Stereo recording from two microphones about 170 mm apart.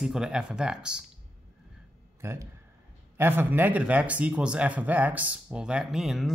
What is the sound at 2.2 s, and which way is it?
Speech, 15° right (ahead or behind).